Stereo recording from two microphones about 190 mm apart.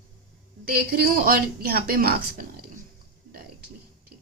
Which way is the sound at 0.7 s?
50° right (ahead or behind).